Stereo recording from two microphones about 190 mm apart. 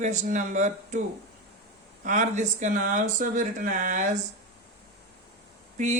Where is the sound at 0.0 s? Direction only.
40° right (ahead or behind).